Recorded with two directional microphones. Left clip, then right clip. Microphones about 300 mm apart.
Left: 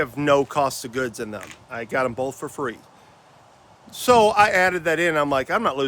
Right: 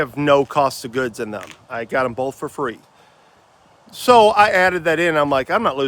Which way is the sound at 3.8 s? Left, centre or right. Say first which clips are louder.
Right 5 dB; centre.